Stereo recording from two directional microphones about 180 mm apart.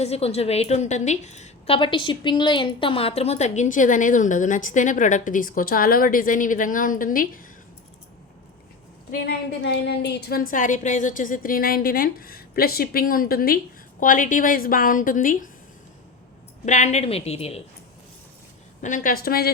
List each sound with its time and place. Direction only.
0.0 s a woman's voice: 35° left (ahead or behind); by 7.4 s 50° left (ahead or behind)
9.1 s a woman's voice: 60° left (ahead or behind)
16.6 s a woman's voice: 40° left (ahead or behind)
18.8 s a woman's voice: 45° left (ahead or behind)